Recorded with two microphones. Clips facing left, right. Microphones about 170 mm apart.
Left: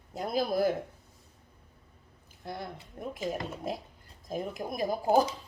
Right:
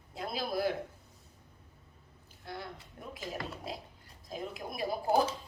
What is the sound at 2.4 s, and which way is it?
A woman's voice, 50° left (ahead or behind).